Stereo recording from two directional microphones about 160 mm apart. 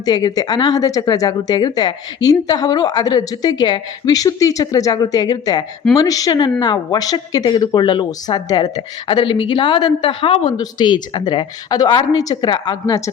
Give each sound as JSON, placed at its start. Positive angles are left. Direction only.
{"t": 0.0, "sound": "speech", "side_deg": 25}